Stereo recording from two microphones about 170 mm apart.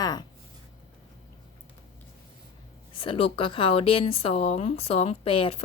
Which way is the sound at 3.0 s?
30° left (ahead or behind).